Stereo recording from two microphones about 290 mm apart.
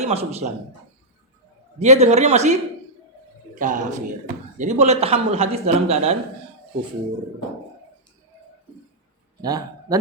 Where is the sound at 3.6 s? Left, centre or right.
Right.